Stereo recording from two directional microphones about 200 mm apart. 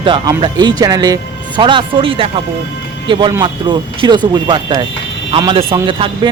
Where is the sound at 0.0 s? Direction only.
25° right (ahead or behind).